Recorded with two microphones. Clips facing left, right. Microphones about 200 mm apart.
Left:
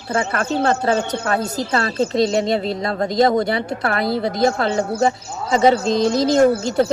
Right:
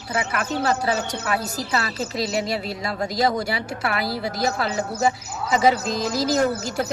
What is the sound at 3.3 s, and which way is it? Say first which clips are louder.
Speech: left 7 dB; 50° left (ahead or behind).